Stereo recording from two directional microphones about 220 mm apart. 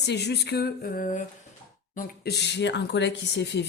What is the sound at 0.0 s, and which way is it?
Speech, 50° left (ahead or behind).